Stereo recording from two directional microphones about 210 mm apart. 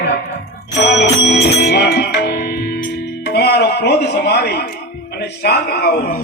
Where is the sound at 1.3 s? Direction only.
50° left (ahead or behind).